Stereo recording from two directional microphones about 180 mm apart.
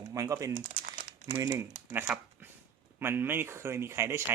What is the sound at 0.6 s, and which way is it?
Crumpling, 45° right (ahead or behind).